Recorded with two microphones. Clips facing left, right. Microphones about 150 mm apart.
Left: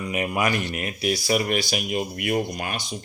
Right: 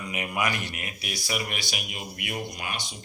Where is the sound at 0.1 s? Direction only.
35° left (ahead or behind).